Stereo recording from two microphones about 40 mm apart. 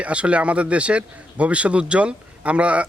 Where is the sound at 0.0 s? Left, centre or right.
Right.